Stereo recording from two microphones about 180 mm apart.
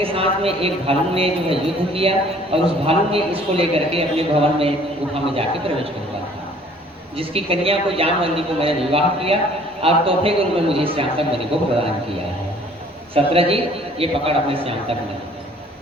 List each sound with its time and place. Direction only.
0.0 s a man's voice: 30° right (ahead or behind)
7.2 s a man's voice: 30° right (ahead or behind)
13.1 s a man's voice: 30° right (ahead or behind)